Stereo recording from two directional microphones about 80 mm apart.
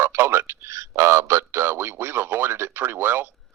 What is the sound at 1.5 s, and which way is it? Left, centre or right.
Speech, right.